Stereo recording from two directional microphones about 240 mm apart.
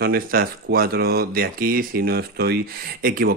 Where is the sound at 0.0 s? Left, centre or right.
Right.